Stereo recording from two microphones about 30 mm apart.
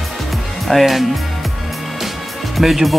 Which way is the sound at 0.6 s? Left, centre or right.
Centre.